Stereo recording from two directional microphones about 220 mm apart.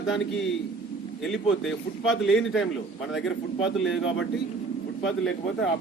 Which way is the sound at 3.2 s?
60° left (ahead or behind).